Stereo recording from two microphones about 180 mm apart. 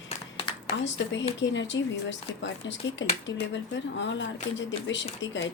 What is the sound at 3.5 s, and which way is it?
Speech, 80° left.